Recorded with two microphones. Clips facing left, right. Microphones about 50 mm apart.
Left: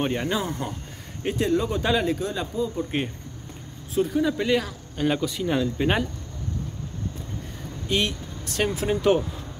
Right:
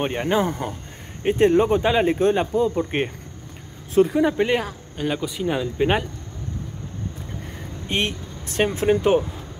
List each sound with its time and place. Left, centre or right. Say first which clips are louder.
0.0 s speech: right 4 dB; right
1.2 s speech: right 7 dB; right
1.8 s speech: right 4 dB; right
2.0 s speech: right 8 dB; right
3.9 s speech: right 5 dB; right
4.4 s speech: right 2 dB; right
4.9 s speech: left 1 dB; centre
5.2 s speech: even; centre
7.9 s speech: right 1 dB; right